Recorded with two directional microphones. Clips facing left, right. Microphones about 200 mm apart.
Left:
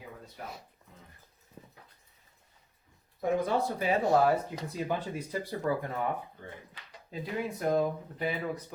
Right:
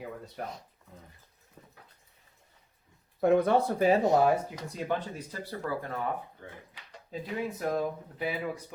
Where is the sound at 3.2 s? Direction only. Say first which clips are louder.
Right 6 dB; 65° right (ahead or behind).